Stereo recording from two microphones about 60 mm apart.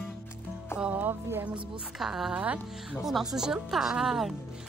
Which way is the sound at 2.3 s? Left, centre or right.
Right.